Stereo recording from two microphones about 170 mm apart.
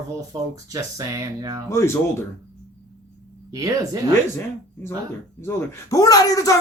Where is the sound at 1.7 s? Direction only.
15° left (ahead or behind).